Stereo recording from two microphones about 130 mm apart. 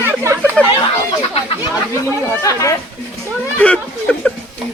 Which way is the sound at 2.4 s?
25° left (ahead or behind).